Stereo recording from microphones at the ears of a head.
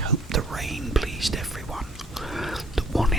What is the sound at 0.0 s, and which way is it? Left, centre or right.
Whispering, right.